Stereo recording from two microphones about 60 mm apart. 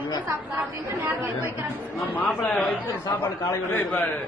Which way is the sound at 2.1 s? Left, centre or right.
Left.